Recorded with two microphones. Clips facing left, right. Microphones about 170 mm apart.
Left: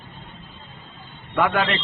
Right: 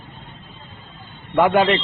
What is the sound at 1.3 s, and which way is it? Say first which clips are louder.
Speech: right 6 dB; 30° right (ahead or behind).